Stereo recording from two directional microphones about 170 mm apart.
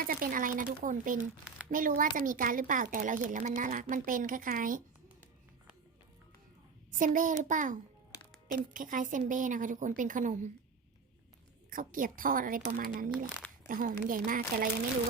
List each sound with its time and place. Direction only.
0.0 s speech: 55° right (ahead or behind)
1.2 s speech: 5° right (ahead or behind)
1.7 s speech: 55° right (ahead or behind)
7.0 s speech: 50° right (ahead or behind)
11.7 s a woman's voice: 50° right (ahead or behind)